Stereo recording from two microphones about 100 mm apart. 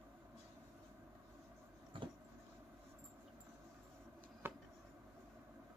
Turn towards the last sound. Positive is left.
turn(degrees=-25)  # may be behind; listen again after turning